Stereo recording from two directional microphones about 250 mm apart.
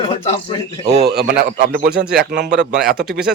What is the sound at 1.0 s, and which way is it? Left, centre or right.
Speech, right.